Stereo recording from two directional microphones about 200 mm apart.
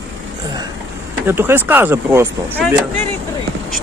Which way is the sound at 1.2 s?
10° right (ahead or behind).